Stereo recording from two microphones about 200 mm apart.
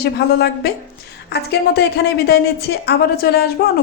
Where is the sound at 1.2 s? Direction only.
55° left (ahead or behind).